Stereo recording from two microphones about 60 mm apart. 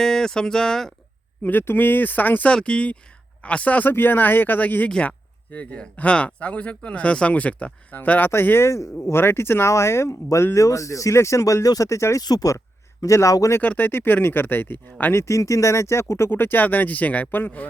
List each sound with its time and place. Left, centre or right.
0.0 s speech: centre
1.4 s speech: left
2.5 s speech: centre
3.8 s speech: left
8.3 s speech: left
9.1 s speech: left
10.5 s speech: left
12.3 s speech: left
13.0 s speech: left
13.6 s speech: left
15.1 s speech: left